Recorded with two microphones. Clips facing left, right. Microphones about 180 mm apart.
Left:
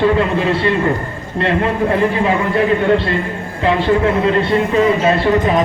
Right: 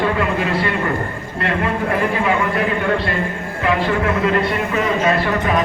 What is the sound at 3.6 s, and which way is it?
A man's voice, 30° left (ahead or behind).